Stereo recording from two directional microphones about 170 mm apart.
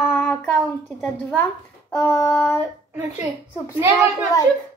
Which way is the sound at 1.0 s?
10° left (ahead or behind).